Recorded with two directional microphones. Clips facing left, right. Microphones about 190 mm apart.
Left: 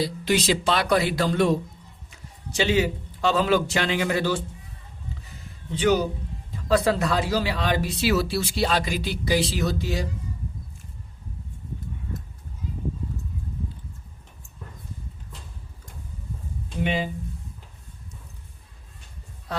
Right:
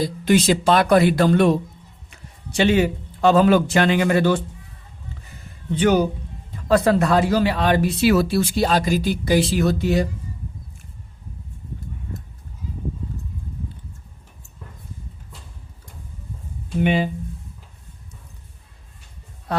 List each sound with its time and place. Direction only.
0.0 s a man's voice: 50° right (ahead or behind)
5.7 s speech: 55° right (ahead or behind)
16.8 s speech: 60° right (ahead or behind)
19.5 s music: 60° right (ahead or behind)